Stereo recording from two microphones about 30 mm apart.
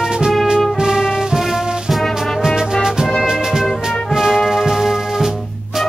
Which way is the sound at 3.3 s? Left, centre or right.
Centre.